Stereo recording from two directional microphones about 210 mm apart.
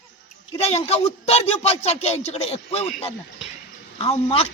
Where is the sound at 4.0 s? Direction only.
30° left (ahead or behind).